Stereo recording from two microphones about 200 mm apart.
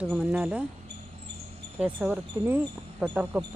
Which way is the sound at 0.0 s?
5° right (ahead or behind).